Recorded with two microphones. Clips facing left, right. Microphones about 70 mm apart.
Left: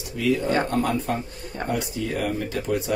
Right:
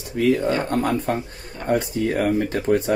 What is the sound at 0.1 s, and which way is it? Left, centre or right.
Speech, right.